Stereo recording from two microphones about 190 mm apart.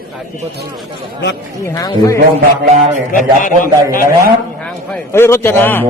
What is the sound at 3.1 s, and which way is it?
Speech, 45° left (ahead or behind).